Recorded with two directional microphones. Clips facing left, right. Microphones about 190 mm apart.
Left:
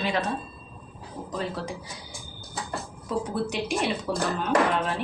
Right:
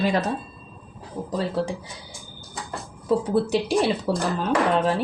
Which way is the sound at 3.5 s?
35° right (ahead or behind).